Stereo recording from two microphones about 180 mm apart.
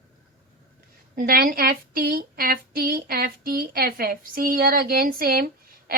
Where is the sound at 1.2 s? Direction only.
55° right (ahead or behind).